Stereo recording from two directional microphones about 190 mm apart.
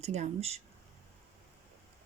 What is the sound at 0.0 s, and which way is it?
Speech, 35° right (ahead or behind).